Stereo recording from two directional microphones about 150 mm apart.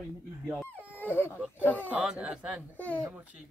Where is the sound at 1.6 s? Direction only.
10° left (ahead or behind).